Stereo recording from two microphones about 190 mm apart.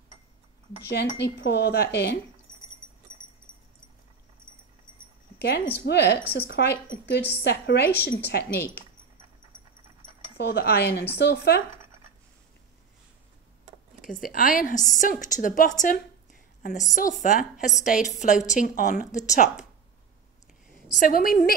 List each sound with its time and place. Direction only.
0.8 s speech: 60° left (ahead or behind)
5.9 s speech: 60° left (ahead or behind)
10.3 s speech: 55° left (ahead or behind)
14.0 s a woman's voice: 45° left (ahead or behind)
21.0 s a woman's voice: 50° left (ahead or behind)